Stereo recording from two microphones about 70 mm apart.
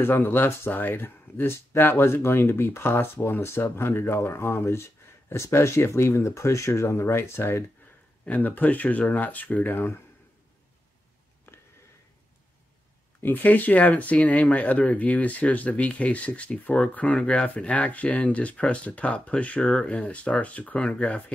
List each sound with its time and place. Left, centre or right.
0.0 s speech: left
8.3 s speech: left
11.5 s a sound: left
13.2 s speech: left